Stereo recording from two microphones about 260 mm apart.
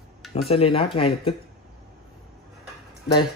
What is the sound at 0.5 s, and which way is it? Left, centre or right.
Speech, left.